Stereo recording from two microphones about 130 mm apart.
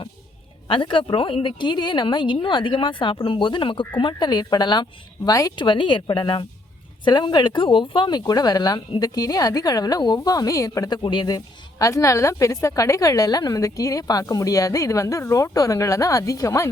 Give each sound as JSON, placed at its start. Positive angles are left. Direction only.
{"t": 0.7, "sound": "speech", "side_deg": 40}